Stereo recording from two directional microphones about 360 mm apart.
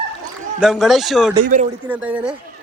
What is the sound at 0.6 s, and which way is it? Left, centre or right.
Speech, centre.